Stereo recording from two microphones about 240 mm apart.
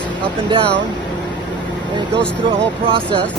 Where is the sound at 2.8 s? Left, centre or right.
Right.